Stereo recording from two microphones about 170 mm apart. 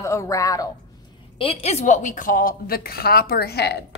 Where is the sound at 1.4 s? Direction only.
35° left (ahead or behind).